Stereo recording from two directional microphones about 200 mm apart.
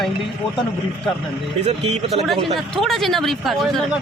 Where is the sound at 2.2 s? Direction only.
Centre (ahead or behind).